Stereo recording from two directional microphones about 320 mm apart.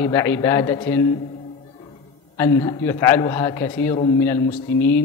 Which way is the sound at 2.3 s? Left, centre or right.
Centre.